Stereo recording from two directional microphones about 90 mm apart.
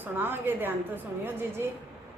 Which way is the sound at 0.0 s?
20° right (ahead or behind).